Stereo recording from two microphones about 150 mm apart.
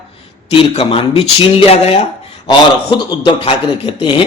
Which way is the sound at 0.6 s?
40° left (ahead or behind).